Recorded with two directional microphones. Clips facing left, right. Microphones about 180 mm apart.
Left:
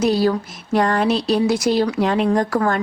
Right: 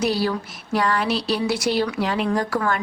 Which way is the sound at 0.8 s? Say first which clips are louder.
Left 5 dB; 45° left (ahead or behind).